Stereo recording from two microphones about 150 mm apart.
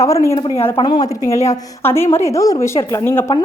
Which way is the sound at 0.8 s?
30° left (ahead or behind).